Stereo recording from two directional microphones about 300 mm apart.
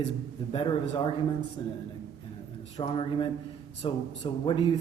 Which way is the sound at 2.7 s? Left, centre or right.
Centre.